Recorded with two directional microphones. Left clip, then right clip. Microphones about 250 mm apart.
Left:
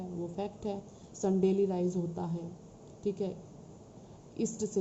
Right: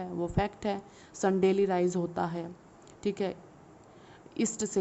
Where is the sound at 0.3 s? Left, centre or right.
Right.